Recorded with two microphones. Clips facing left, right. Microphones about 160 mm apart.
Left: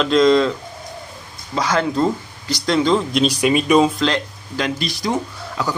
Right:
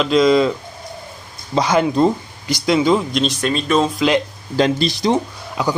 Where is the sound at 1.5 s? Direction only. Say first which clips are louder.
Right 3 dB; 20° right (ahead or behind).